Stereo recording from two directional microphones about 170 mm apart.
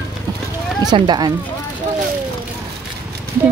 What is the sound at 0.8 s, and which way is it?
Speech, 25° right (ahead or behind).